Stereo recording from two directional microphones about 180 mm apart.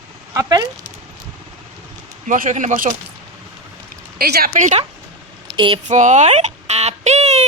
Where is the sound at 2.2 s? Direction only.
50° right (ahead or behind).